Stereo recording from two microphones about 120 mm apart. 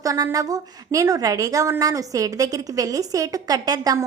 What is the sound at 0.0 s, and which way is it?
A woman's voice, 30° right (ahead or behind).